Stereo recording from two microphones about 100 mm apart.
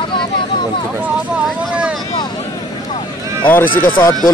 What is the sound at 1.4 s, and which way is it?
Vehicle, 10° right (ahead or behind).